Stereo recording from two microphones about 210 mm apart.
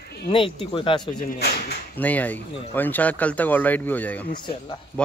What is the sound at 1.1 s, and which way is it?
Speech, 45° left (ahead or behind).